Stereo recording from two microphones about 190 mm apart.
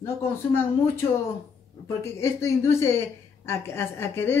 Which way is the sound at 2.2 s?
15° left (ahead or behind).